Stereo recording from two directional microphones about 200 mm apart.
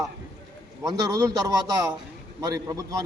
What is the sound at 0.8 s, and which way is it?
A man's voice, 20° right (ahead or behind).